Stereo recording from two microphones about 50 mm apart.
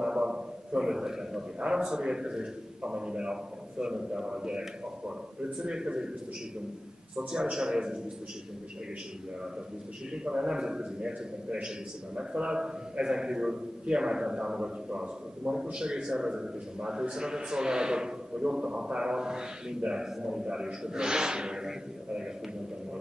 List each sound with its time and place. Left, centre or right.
0.0 s a man's voice: centre
7.2 s a man's voice: centre
10.1 s a man's voice: centre